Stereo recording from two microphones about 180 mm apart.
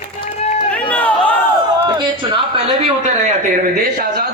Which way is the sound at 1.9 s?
25° right (ahead or behind).